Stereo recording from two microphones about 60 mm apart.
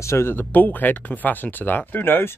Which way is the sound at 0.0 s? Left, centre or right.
Left.